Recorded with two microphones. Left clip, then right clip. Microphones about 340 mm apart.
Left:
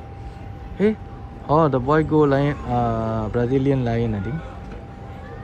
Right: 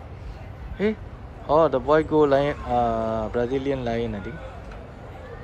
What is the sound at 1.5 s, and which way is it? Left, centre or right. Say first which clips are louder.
Speech: even; centre.